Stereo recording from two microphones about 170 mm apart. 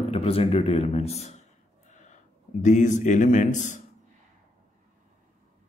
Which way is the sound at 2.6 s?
45° left (ahead or behind).